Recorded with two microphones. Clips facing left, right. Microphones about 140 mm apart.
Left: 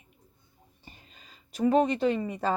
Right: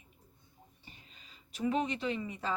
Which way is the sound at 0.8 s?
45° left (ahead or behind).